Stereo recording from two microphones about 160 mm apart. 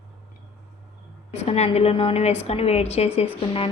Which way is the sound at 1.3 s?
40° left (ahead or behind).